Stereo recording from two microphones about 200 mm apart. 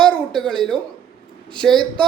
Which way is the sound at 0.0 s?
Centre (ahead or behind).